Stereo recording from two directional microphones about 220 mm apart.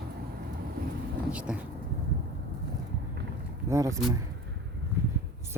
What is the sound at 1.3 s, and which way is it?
Speech, 5° right (ahead or behind).